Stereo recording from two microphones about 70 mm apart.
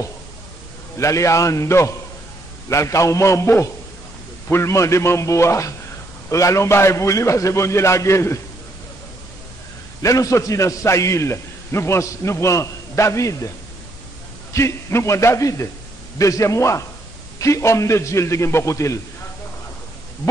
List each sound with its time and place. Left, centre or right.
0.9 s a man's voice: left
10.0 s a man's voice: left
14.5 s a man's voice: left